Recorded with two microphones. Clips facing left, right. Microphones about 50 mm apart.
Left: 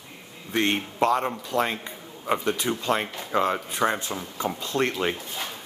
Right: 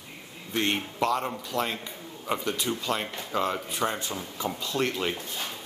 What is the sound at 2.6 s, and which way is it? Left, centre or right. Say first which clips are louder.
Speech: left 4 dB; left.